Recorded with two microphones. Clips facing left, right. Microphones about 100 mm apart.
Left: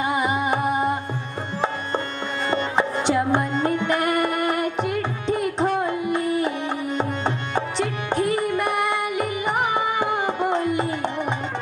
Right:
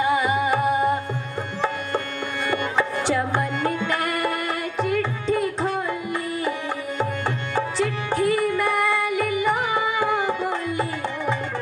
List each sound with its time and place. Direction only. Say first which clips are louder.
0.0 s music: right 2 dB; 20° left (ahead or behind)
2.5 s music: left 1 dB; 25° left (ahead or behind)
7.0 s tabla: left 1 dB; 20° left (ahead or behind)